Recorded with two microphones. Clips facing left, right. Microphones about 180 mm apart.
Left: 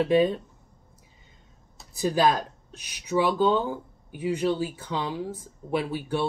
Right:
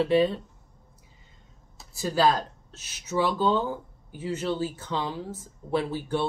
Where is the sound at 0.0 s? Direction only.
15° left (ahead or behind).